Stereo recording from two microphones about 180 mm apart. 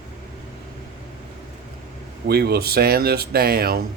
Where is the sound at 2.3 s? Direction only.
60° right (ahead or behind).